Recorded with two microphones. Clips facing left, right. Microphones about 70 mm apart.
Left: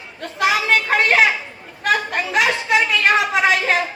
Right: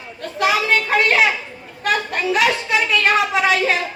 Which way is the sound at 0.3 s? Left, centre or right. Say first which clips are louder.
Even; left.